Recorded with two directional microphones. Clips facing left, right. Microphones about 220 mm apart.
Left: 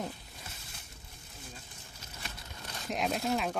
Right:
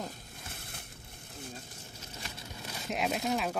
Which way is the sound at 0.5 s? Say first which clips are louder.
Right 5 dB; 60° right (ahead or behind).